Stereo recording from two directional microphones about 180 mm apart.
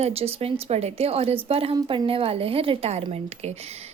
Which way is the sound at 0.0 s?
35° right (ahead or behind).